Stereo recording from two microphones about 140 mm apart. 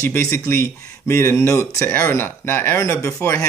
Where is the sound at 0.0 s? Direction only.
20° left (ahead or behind).